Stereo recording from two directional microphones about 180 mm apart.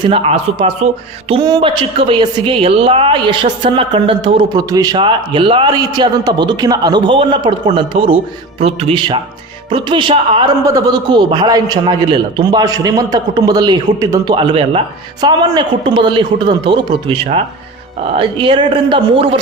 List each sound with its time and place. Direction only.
0.0 s a man's voice: 30° right (ahead or behind)
1.3 s a woman's voice: 25° right (ahead or behind)